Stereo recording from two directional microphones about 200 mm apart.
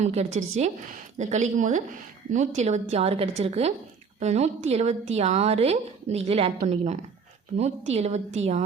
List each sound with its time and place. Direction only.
0.0 s a woman's voice: 35° right (ahead or behind)